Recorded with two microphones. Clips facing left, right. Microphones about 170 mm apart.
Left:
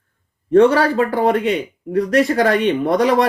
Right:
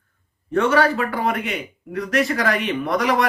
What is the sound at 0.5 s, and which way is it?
Speech, 30° left (ahead or behind).